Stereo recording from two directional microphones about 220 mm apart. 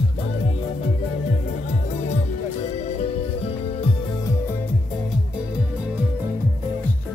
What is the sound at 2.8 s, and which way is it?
Music, 30° left (ahead or behind).